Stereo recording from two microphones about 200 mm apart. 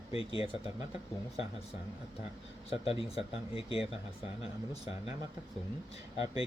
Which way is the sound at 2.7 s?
30° left (ahead or behind).